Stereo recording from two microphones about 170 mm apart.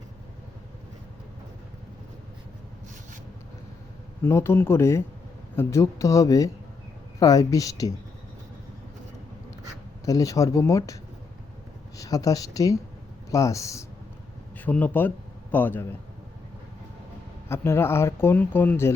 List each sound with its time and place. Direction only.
4.2 s speech: 15° left (ahead or behind)
10.1 s speech: 20° left (ahead or behind)
11.9 s speech: 20° left (ahead or behind)
17.5 s speech: 15° left (ahead or behind)